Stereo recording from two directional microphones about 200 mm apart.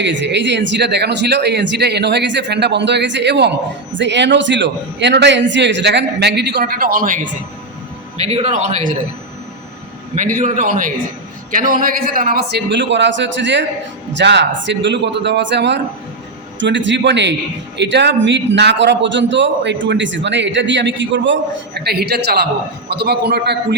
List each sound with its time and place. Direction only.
0.0 s a man's voice: 65° right (ahead or behind); by 7.3 s 40° right (ahead or behind)
8.2 s a man's voice: 30° right (ahead or behind)
10.2 s a man's voice: 40° right (ahead or behind); by 21.3 s 65° right (ahead or behind)
21.8 s a man's voice: 55° right (ahead or behind)